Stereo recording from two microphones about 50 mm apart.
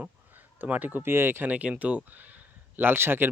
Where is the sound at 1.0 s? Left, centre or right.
Right.